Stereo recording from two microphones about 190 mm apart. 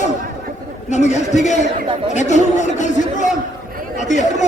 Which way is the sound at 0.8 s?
35° left (ahead or behind).